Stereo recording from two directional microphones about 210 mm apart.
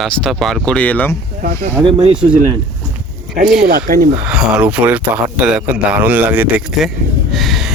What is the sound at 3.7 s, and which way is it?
Speech, 50° right (ahead or behind).